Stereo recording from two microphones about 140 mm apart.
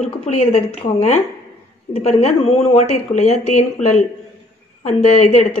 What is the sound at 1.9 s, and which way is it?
Speech, 45° left (ahead or behind).